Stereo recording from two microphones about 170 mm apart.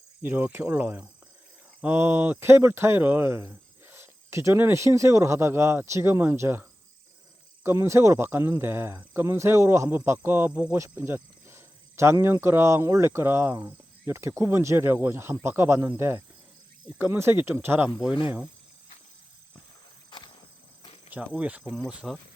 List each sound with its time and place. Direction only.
0.2 s speech: 10° right (ahead or behind)
20.1 s insect: 25° left (ahead or behind)
21.1 s speech: 10° right (ahead or behind)